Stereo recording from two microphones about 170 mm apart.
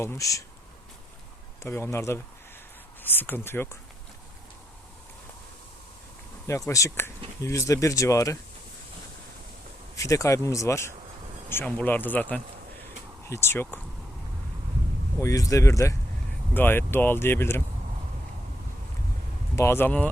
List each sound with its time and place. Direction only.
0.0 s speech: 15° left (ahead or behind)
1.6 s speech: 15° left (ahead or behind)
6.7 s speech: 20° left (ahead or behind)
9.9 s speech: 20° left (ahead or behind)
15.2 s speech: 20° left (ahead or behind)
19.5 s speech: 15° left (ahead or behind)